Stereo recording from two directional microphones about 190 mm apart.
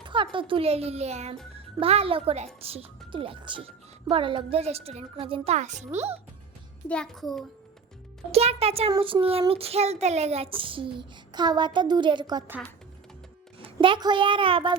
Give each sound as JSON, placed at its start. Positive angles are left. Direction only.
{"t": 0.1, "sound": "a woman's voice", "side_deg": -25}
{"t": 6.8, "sound": "a child's voice", "side_deg": 5}
{"t": 8.3, "sound": "a woman's voice", "side_deg": -35}
{"t": 13.7, "sound": "speech", "side_deg": -25}